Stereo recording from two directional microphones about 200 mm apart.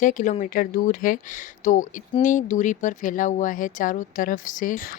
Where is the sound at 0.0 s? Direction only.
40° left (ahead or behind).